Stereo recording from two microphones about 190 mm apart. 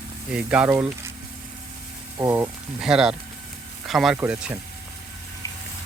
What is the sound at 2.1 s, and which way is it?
Speech, 15° right (ahead or behind).